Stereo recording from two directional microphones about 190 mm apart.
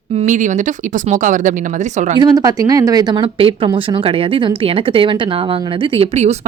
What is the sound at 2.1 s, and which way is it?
Speech, 20° right (ahead or behind).